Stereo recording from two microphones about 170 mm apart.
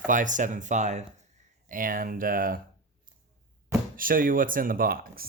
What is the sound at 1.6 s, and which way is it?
Speech, 55° right (ahead or behind).